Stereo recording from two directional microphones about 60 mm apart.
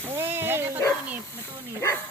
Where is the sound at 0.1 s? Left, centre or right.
Right.